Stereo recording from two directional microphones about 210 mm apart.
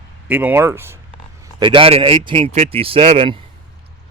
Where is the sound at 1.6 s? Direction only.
25° right (ahead or behind).